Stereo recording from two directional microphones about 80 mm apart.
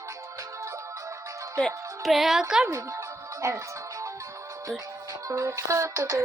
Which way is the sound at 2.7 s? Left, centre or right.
Right.